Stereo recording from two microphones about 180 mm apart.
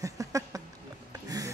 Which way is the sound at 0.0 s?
20° right (ahead or behind).